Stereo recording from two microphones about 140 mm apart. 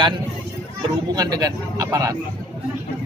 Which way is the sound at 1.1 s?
25° right (ahead or behind).